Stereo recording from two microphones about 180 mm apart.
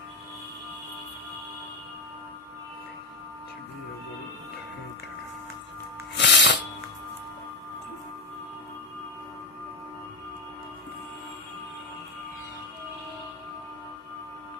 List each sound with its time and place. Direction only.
6.1 s music: 75° left (ahead or behind)